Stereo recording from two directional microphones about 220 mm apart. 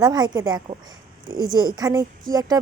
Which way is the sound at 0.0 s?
20° right (ahead or behind).